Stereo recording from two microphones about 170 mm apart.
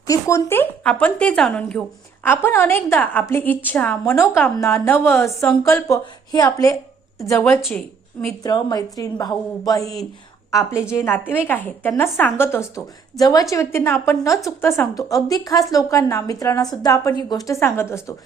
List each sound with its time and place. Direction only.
0.1 s a woman's voice: 15° left (ahead or behind)
2.2 s a woman's voice: 15° left (ahead or behind)
8.4 s a woman's voice: 20° left (ahead or behind)